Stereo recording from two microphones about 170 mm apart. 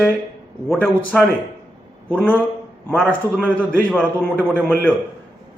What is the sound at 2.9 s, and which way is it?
Speech, 5° left (ahead or behind).